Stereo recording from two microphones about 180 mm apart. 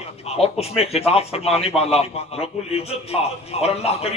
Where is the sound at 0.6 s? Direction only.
35° left (ahead or behind).